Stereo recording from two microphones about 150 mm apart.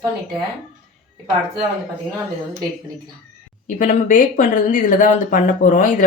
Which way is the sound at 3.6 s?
60° left (ahead or behind).